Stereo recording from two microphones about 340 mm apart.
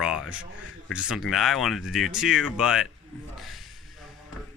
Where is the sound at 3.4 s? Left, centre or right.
Centre.